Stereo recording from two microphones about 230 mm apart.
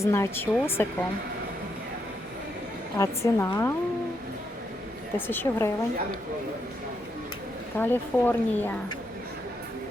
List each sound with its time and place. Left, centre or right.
0.0 s speech: centre
3.0 s speech: centre
5.1 s speech: centre
7.8 s speech: centre